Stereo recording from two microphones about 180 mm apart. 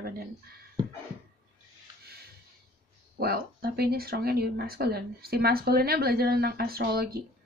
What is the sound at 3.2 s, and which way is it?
Speech, 60° right (ahead or behind).